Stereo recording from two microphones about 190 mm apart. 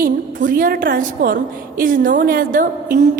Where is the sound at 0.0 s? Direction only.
45° right (ahead or behind).